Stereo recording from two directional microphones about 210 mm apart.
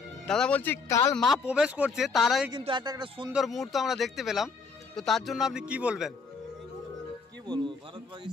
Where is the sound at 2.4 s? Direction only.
20° right (ahead or behind).